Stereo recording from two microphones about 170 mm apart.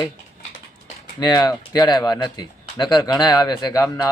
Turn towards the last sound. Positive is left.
turn(degrees=20)  # may be behind; listen again after turning